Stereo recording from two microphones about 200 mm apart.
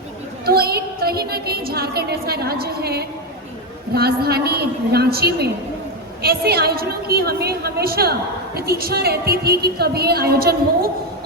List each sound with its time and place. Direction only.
0.4 s a woman's voice: 50° right (ahead or behind)